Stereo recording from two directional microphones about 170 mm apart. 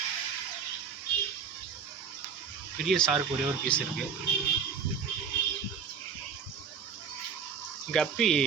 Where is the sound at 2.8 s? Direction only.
Centre (ahead or behind).